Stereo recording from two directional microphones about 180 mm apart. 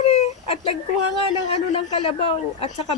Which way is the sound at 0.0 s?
35° left (ahead or behind).